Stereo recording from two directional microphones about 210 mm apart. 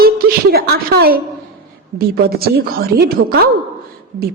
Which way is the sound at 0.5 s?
50° right (ahead or behind).